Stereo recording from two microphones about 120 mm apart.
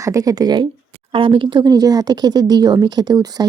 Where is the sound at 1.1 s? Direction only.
45° right (ahead or behind).